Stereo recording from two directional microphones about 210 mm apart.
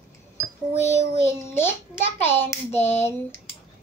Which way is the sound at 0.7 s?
30° left (ahead or behind).